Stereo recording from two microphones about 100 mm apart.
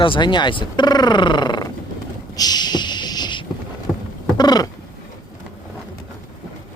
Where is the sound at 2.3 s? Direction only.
40° left (ahead or behind).